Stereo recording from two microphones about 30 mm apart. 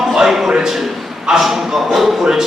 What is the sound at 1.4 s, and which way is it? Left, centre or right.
Speech, centre.